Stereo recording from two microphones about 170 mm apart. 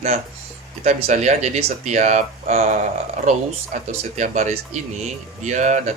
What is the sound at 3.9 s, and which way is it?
Speech, 45° right (ahead or behind).